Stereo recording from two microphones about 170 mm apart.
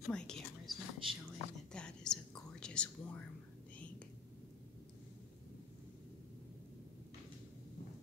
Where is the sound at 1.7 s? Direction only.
5° left (ahead or behind).